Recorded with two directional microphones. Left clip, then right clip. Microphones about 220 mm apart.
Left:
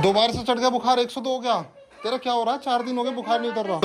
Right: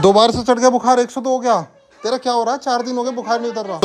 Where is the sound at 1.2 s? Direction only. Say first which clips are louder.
Right 7 dB; 10° right (ahead or behind).